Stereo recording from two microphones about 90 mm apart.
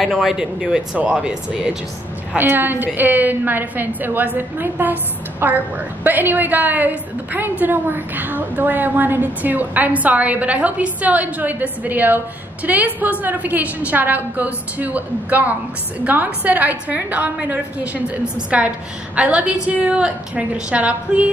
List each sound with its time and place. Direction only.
0.0 s a woman's voice: 5° right (ahead or behind)
2.3 s a woman's voice: 20° right (ahead or behind)